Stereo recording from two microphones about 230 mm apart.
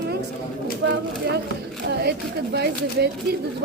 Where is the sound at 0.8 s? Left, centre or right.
Right.